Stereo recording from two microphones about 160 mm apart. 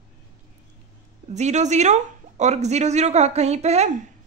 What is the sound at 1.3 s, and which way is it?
Speech, 45° right (ahead or behind).